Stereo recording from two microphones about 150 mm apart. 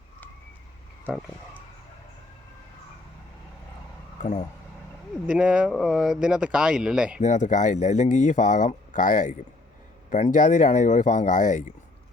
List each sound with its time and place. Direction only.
5.2 s speech: 5° right (ahead or behind)
7.2 s speech: 55° left (ahead or behind)